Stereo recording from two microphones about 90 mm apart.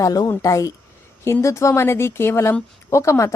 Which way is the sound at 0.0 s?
45° left (ahead or behind).